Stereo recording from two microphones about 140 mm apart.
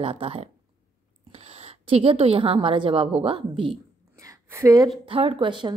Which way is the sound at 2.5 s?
35° right (ahead or behind).